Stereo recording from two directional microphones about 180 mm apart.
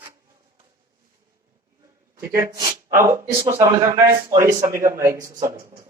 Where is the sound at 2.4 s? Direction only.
20° right (ahead or behind).